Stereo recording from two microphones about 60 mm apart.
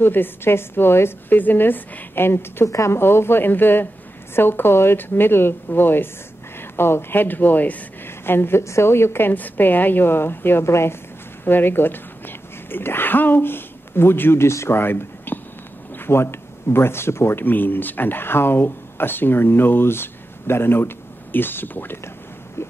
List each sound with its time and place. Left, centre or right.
0.0 s speech: left
2.6 s speech: left
8.3 s a woman's voice: left
9.3 s speech: left
11.4 s speech: left
17.5 s speech: left
22.6 s a sound: left